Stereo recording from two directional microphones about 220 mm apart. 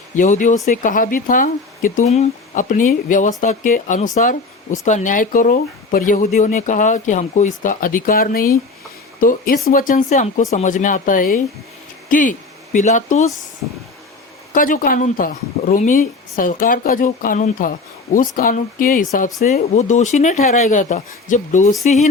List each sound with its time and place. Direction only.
0.2 s speech: 35° left (ahead or behind)
14.5 s speech: 40° left (ahead or behind)